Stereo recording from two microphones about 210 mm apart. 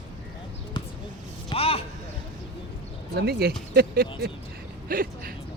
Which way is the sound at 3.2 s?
50° right (ahead or behind).